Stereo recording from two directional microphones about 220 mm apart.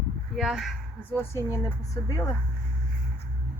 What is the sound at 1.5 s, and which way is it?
Speech, 15° left (ahead or behind).